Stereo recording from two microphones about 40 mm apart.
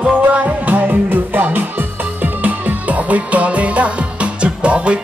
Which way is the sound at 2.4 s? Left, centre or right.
Right.